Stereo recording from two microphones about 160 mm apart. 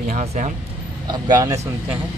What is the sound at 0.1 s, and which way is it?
Speech, 45° right (ahead or behind).